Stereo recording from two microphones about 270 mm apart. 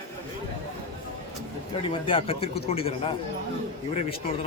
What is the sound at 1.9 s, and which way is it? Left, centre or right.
Speech, centre.